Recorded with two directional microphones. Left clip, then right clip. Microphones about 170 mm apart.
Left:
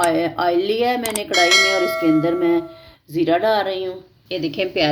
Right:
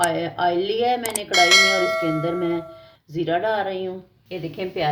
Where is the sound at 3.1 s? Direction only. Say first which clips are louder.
Left 5 dB; 40° left (ahead or behind).